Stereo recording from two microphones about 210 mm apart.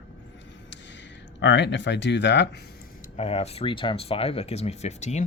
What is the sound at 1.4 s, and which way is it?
Speech, 60° left (ahead or behind).